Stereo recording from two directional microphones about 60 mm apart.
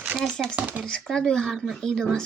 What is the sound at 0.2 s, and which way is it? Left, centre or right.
Speech, centre.